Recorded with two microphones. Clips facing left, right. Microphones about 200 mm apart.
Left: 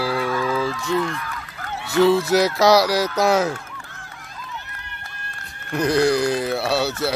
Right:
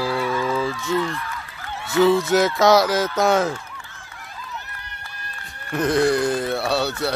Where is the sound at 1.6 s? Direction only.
50° left (ahead or behind).